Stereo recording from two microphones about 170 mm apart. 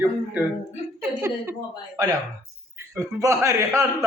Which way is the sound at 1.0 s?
15° right (ahead or behind).